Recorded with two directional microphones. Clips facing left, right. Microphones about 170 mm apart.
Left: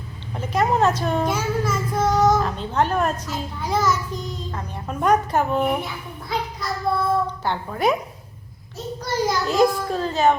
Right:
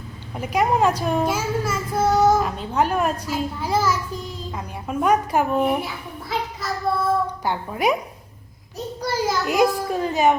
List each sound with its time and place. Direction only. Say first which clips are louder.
0.3 s a child's voice: even; 10° right (ahead or behind)
9.0 s a child's voice: even; 10° right (ahead or behind)